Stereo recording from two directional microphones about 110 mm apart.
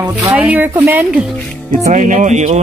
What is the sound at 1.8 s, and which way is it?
Speech, 90° right.